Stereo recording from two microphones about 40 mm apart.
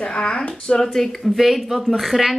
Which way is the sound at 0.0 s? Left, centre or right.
Left.